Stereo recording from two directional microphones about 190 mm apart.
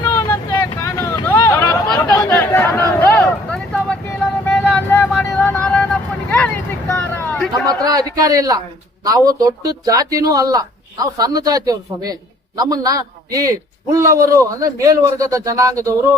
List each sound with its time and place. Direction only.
0.0 s vehicle: 15° left (ahead or behind)
0.8 s chatter: 15° left (ahead or behind)
4.4 s vehicle: 5° left (ahead or behind)
7.7 s a man's voice: 20° right (ahead or behind)